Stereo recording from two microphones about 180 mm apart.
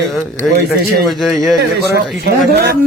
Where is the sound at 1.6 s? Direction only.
60° right (ahead or behind).